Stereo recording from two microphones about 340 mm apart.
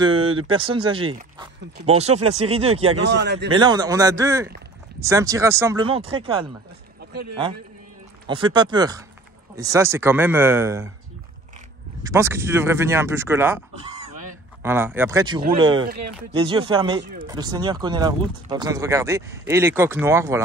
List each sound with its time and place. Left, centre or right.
0.0 s speech: centre
2.9 s speech: right
3.4 s speech: centre
8.3 s speech: centre
12.0 s speech: centre